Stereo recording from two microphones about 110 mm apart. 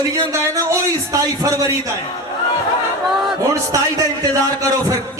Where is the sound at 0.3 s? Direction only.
30° right (ahead or behind).